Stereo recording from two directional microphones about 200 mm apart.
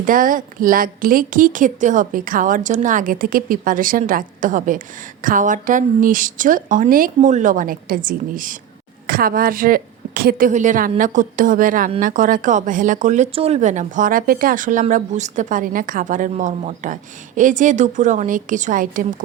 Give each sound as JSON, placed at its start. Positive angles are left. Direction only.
{"t": 0.0, "sound": "a woman's voice", "side_deg": -45}